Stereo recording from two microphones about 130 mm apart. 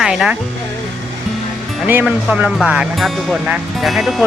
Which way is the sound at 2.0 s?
5° right (ahead or behind).